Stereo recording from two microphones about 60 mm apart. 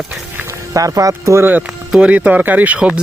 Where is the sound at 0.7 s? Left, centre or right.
Right.